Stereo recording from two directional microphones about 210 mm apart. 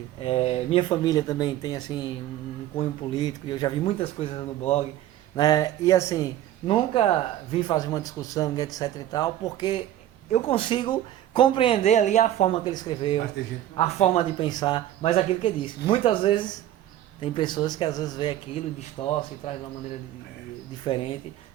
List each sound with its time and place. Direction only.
0.2 s speech: 25° left (ahead or behind)
5.4 s speech: 20° left (ahead or behind)
20.8 s speech: 25° left (ahead or behind)